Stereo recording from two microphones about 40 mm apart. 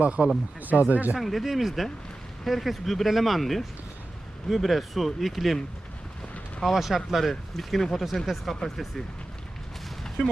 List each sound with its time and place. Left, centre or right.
0.0 s speech: right
0.6 s speech: right
1.2 s speech: centre
6.6 s speech: centre